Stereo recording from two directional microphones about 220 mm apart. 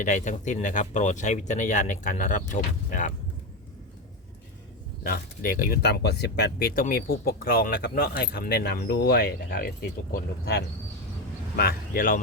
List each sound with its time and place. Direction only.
0.0 s speech: 35° left (ahead or behind)
5.0 s speech: 40° left (ahead or behind)